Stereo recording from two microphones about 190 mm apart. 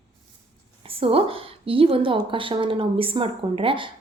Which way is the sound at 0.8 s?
30° right (ahead or behind).